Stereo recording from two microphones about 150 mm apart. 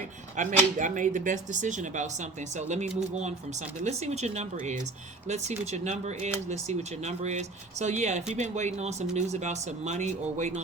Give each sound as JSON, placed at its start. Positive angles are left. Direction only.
{"t": 0.3, "sound": "speech", "side_deg": -55}